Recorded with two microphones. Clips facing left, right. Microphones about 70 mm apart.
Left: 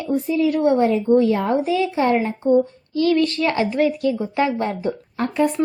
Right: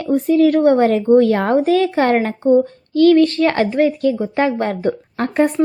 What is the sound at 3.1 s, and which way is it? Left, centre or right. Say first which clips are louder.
Speech: right 5 dB; right.